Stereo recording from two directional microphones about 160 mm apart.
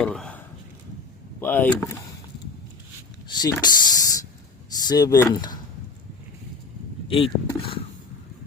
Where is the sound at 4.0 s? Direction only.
20° left (ahead or behind).